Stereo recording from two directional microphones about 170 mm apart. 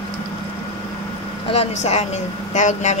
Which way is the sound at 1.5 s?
40° left (ahead or behind).